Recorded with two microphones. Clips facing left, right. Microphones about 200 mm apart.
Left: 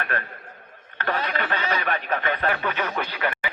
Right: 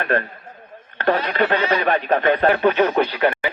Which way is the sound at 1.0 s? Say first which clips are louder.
Right 8 dB; 35° right (ahead or behind).